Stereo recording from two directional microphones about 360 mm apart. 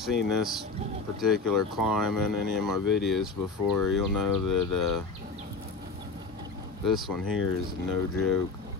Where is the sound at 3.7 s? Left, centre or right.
Left.